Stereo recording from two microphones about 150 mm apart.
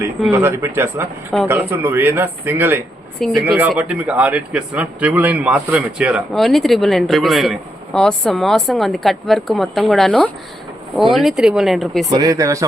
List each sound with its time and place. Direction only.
0.3 s a man's voice: 15° right (ahead or behind)
3.2 s a man's voice: 5° left (ahead or behind)
3.4 s a man's voice: 10° right (ahead or behind)
12.0 s speech: 25° right (ahead or behind)